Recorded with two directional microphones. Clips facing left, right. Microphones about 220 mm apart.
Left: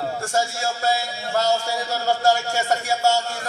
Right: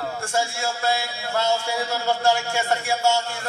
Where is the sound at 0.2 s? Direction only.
40° left (ahead or behind).